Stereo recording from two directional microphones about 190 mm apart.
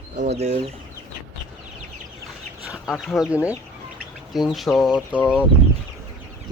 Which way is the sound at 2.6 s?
5° right (ahead or behind).